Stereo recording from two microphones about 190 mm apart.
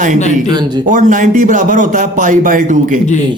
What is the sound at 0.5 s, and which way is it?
Speech, 20° right (ahead or behind).